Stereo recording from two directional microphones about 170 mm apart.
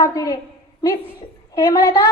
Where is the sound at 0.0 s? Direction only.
20° left (ahead or behind).